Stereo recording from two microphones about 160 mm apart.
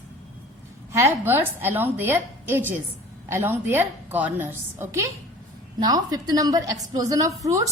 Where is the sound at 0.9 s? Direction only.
15° right (ahead or behind).